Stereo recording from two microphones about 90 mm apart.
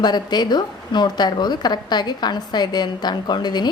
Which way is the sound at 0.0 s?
50° left (ahead or behind).